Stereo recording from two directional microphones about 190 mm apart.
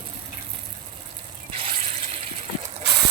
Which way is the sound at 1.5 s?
35° right (ahead or behind).